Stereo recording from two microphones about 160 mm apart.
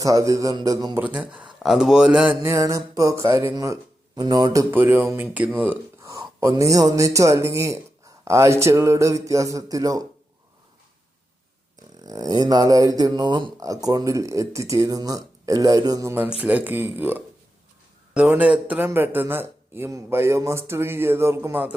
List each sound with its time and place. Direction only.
0.0 s speech: 20° right (ahead or behind)
0.9 s a man's voice: 10° right (ahead or behind)
2.4 s speech: 20° right (ahead or behind)
4.7 s a man's voice: 15° right (ahead or behind)
12.0 s speech: 25° right (ahead or behind)
16.4 s a man's voice: 10° right (ahead or behind)